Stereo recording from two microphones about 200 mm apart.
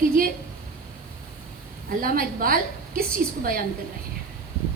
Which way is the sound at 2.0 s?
45° right (ahead or behind).